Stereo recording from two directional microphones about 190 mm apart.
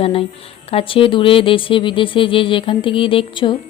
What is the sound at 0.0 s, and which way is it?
Speech, 30° left (ahead or behind).